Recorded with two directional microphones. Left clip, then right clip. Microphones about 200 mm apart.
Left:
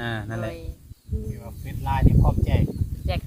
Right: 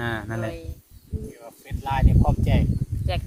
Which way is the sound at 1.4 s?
65° right (ahead or behind).